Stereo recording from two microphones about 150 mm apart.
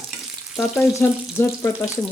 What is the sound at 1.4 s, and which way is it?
Speech, 15° left (ahead or behind).